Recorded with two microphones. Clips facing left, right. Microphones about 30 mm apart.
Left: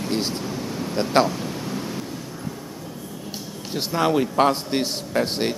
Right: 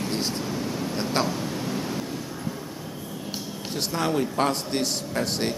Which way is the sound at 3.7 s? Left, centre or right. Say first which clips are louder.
Left 5 dB; centre.